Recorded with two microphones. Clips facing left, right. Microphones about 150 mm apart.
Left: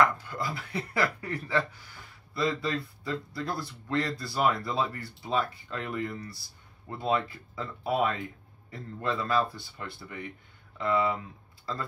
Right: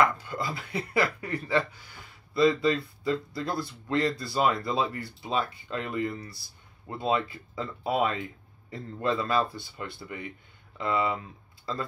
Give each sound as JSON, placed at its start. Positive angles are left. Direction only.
{"t": 0.0, "sound": "speech", "side_deg": -20}